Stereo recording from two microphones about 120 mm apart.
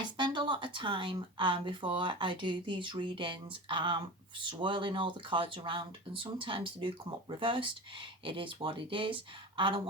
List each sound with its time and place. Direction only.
0.0 s speech: 40° right (ahead or behind)